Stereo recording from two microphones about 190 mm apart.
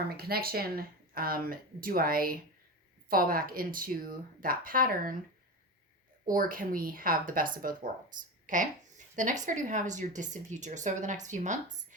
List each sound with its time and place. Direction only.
0.2 s speech: 55° right (ahead or behind)
6.2 s speech: 45° right (ahead or behind)